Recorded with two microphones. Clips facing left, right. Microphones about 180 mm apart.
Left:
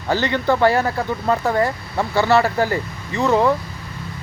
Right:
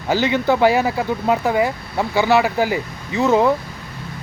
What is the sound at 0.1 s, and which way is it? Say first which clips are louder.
Speech: right 2 dB; 5° right (ahead or behind).